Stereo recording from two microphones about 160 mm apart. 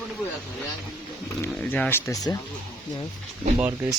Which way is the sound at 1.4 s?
10° left (ahead or behind).